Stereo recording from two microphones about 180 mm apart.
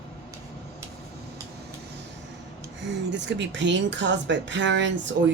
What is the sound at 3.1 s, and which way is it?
Speech, 80° right.